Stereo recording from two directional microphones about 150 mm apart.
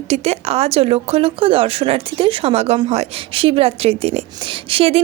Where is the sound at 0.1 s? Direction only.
45° right (ahead or behind).